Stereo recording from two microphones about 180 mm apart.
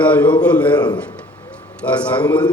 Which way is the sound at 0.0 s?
10° left (ahead or behind).